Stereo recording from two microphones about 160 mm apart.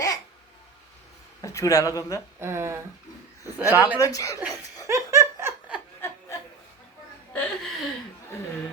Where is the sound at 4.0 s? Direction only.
20° left (ahead or behind).